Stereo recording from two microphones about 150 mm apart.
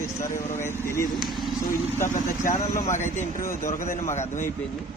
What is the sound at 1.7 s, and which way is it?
Speech, 60° left (ahead or behind).